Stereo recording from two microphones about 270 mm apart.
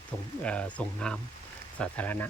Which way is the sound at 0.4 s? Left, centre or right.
Centre.